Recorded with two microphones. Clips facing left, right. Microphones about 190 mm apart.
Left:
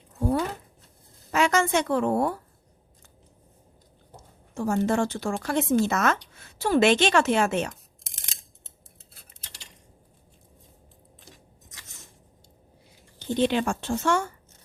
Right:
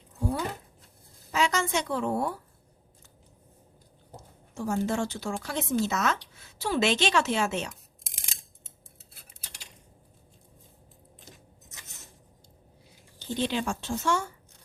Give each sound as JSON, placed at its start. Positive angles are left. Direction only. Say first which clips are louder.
{"t": 0.2, "sound": "speech", "louder": "left 5 dB", "side_deg": 50}
{"t": 4.5, "sound": "speech", "louder": "left 4 dB", "side_deg": 60}
{"t": 13.1, "sound": "speech", "louder": "left 6 dB", "side_deg": 55}